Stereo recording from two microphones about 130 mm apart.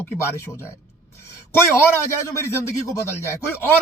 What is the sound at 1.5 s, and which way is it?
Speech, 20° left (ahead or behind).